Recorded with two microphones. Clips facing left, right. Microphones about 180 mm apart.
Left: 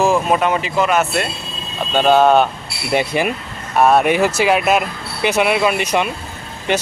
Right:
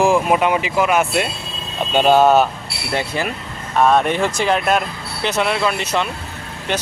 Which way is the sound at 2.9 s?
15° left (ahead or behind).